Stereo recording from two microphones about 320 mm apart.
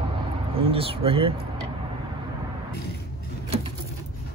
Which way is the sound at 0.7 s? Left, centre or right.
Centre.